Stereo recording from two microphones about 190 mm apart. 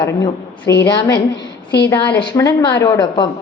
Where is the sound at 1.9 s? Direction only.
15° left (ahead or behind).